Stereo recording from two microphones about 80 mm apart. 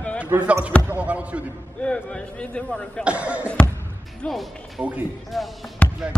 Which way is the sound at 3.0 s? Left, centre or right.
Centre.